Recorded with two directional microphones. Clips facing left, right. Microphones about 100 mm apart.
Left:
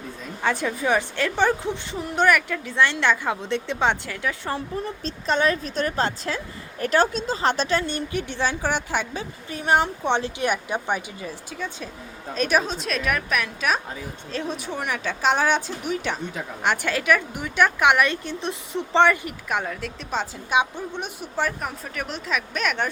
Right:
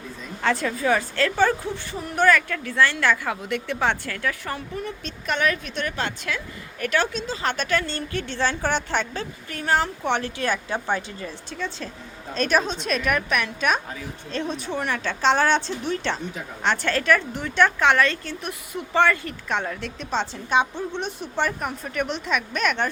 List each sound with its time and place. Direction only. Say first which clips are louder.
0.4 s a woman's voice: right 1 dB; 15° left (ahead or behind)